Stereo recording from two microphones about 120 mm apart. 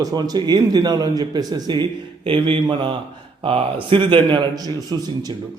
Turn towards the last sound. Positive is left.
turn(degrees=-35)  # may be behind; listen again after turning